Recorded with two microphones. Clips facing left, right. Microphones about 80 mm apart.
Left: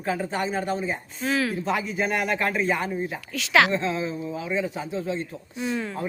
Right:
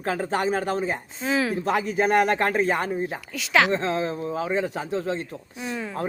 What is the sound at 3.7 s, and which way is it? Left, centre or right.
A man's voice, right.